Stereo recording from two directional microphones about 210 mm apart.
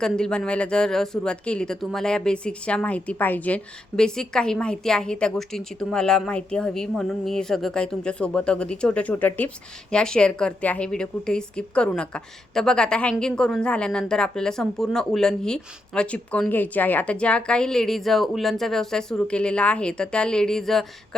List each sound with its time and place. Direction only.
0.0 s a woman's voice: 5° left (ahead or behind)